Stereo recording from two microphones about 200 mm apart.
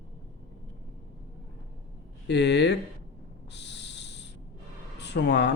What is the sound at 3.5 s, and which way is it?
Owl, 60° left (ahead or behind).